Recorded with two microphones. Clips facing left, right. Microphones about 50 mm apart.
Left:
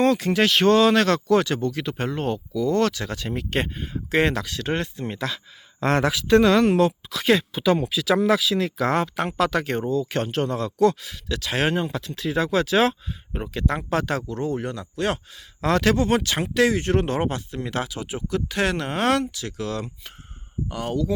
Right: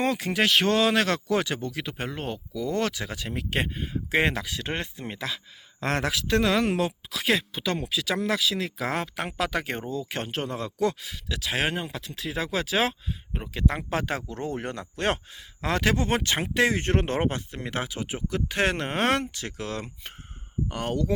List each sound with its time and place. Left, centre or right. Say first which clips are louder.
0.0 s speech: left 5 dB; centre; by 15.2 s right
15.3 s speech: left 6 dB; centre
16.0 s speech: left 4 dB; right